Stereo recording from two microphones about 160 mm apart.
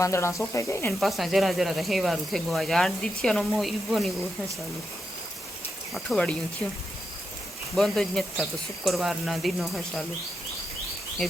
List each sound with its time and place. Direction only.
0.0 s speech: 15° left (ahead or behind)
0.9 s speech: centre (ahead or behind)
5.9 s speech: 5° left (ahead or behind)
7.8 s speech: centre (ahead or behind)